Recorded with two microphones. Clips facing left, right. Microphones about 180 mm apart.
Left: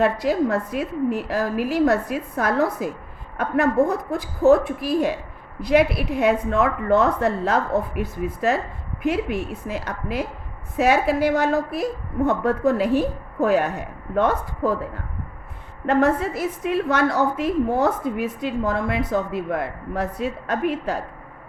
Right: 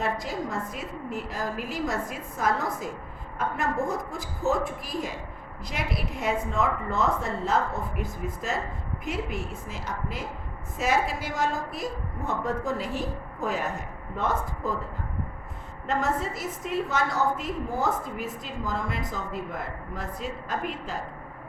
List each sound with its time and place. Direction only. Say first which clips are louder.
0.0 s a woman's voice: left 10 dB; 70° left (ahead or behind)
15.9 s a woman's voice: left 8 dB; 65° left (ahead or behind)